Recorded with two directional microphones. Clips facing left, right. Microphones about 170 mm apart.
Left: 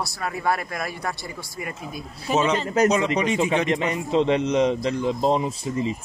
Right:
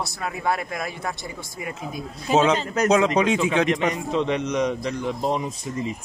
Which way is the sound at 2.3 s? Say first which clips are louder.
Right 3 dB; 90° right.